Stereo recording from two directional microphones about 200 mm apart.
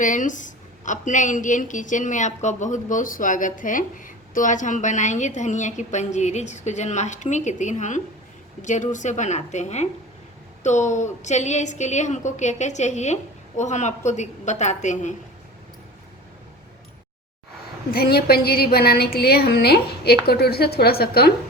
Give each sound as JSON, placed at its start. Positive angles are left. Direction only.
{"t": 0.0, "sound": "a woman's voice", "side_deg": 40}
{"t": 17.9, "sound": "a woman's voice", "side_deg": 50}